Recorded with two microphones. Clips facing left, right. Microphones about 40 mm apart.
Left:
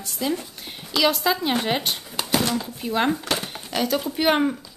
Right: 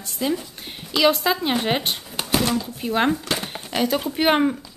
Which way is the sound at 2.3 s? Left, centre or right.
Right.